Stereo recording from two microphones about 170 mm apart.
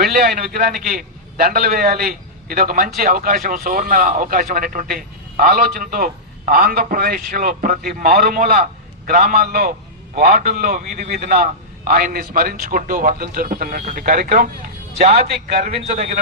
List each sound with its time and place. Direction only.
0.0 s a man's voice: 60° right (ahead or behind)
15.8 s a man's voice: 45° right (ahead or behind)